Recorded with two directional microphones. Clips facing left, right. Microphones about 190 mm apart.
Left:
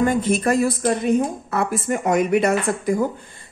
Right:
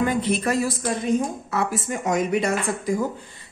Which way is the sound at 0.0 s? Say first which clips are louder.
Left 3 dB; 45° left (ahead or behind).